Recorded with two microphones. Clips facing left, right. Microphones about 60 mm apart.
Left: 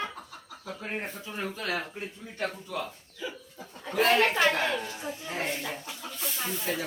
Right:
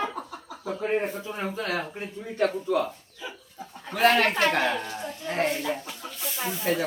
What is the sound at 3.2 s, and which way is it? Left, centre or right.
Speech, centre.